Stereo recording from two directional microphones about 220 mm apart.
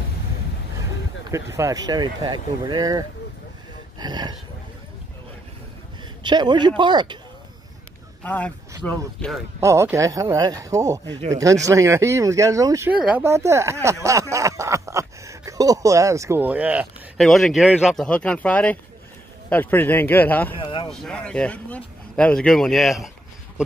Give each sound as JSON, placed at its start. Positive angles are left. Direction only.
{"t": 1.3, "sound": "speech", "side_deg": -15}
{"t": 4.0, "sound": "a sound", "side_deg": -20}
{"t": 6.2, "sound": "speech", "side_deg": -20}
{"t": 8.2, "sound": "speech", "side_deg": 5}
{"t": 9.6, "sound": "a man's voice", "side_deg": -10}
{"t": 20.5, "sound": "speech", "side_deg": 20}
{"t": 20.9, "sound": "speech", "side_deg": 5}